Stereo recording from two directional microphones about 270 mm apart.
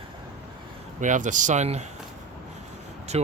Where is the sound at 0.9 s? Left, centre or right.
Right.